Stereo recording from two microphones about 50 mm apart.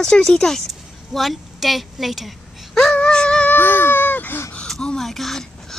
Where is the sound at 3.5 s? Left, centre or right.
Left.